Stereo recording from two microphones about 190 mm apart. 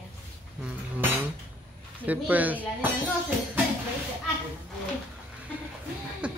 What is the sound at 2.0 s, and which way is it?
Speech, 10° right (ahead or behind).